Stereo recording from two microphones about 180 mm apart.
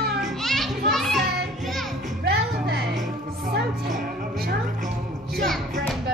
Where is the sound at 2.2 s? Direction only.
65° right (ahead or behind).